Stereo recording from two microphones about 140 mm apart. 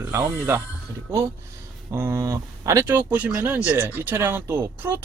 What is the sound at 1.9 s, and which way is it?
Speech, 20° right (ahead or behind).